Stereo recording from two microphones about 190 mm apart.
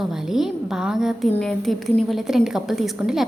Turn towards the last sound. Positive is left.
turn(degrees=0)  # may be behind; listen again after turning